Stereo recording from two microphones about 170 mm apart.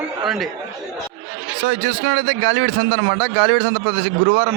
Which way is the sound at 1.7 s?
90° right.